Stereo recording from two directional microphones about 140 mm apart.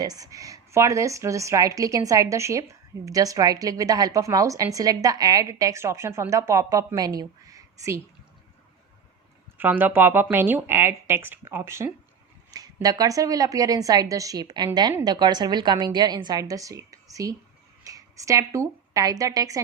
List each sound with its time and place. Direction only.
0.0 s a woman's voice: 25° right (ahead or behind)
9.6 s a woman's voice: 15° right (ahead or behind)